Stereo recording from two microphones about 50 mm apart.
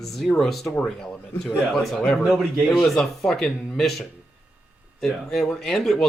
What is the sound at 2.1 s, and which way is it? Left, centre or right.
Speech, centre.